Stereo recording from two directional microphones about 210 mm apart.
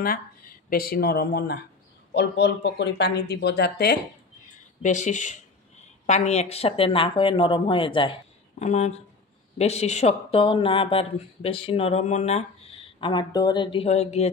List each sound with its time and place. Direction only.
0.0 s speech: 45° left (ahead or behind)
4.8 s speech: 35° left (ahead or behind)